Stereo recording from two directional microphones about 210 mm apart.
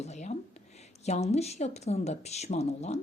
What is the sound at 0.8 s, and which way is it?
A woman's voice, 30° left (ahead or behind).